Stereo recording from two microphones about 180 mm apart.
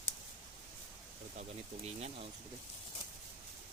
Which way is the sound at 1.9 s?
35° right (ahead or behind).